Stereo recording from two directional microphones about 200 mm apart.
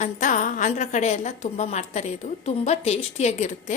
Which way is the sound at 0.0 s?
40° left (ahead or behind).